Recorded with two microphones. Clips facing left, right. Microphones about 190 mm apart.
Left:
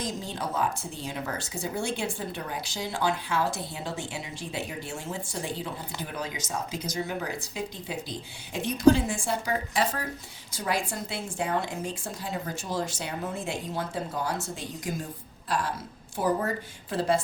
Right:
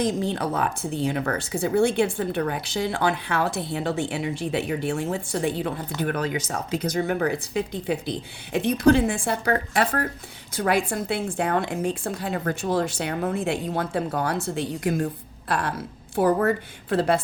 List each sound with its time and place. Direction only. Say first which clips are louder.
0.0 s a woman's voice: right 9 dB; 60° right (ahead or behind)